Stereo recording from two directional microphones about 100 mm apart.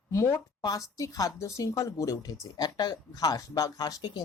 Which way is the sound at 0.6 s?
35° left (ahead or behind).